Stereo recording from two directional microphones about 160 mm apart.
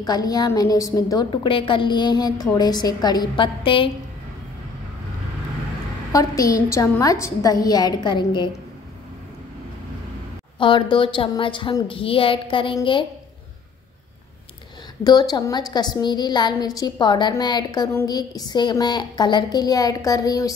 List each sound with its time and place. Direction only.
0.0 s a woman's voice: 25° left (ahead or behind)
6.1 s a woman's voice: 20° left (ahead or behind)
10.6 s a woman's voice: 30° left (ahead or behind)
15.0 s a woman's voice: 25° left (ahead or behind)